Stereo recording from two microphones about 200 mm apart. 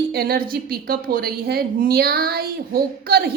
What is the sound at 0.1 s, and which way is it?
A woman's voice, 50° right (ahead or behind).